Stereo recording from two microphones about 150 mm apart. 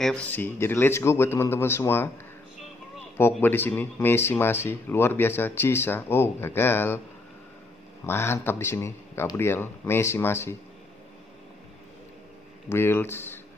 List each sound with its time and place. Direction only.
0.0 s speech: 10° left (ahead or behind)
3.2 s speech: 15° left (ahead or behind)
8.0 s speech: 15° left (ahead or behind)
12.6 s speech: 15° left (ahead or behind)